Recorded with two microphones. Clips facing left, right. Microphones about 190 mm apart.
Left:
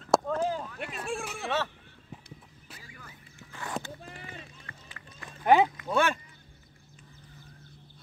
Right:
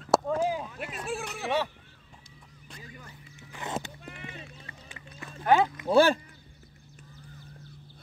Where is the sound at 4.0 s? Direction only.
35° left (ahead or behind).